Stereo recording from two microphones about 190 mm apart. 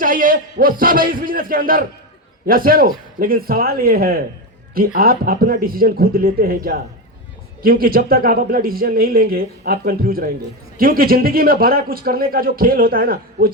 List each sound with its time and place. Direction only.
0.0 s a man's voice: 45° right (ahead or behind)